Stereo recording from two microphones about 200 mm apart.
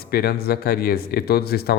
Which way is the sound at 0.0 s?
50° left (ahead or behind).